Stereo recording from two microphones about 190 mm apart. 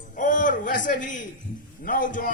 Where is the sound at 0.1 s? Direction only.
45° left (ahead or behind).